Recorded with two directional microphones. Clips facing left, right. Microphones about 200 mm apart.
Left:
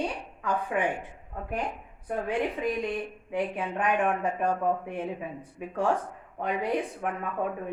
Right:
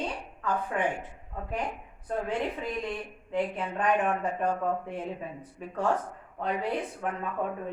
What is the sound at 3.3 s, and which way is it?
Speech, 10° left (ahead or behind).